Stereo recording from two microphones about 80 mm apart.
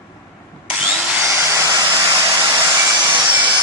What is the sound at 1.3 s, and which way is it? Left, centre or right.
Hair dryer, right.